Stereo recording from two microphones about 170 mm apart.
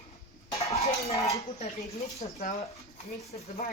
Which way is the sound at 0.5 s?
40° left (ahead or behind).